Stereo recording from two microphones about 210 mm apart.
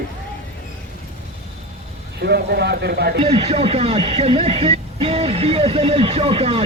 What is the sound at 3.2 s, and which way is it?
Speech, 30° right (ahead or behind).